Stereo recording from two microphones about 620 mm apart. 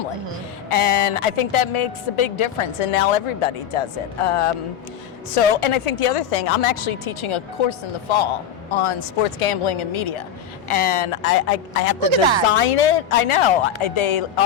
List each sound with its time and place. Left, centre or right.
0.7 s a woman's voice: left
12.0 s speech: right
12.5 s a woman's voice: left